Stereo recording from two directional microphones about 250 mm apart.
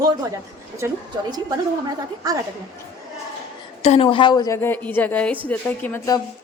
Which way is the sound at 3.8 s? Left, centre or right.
Left.